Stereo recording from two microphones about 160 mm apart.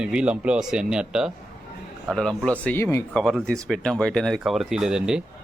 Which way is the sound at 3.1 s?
5° left (ahead or behind).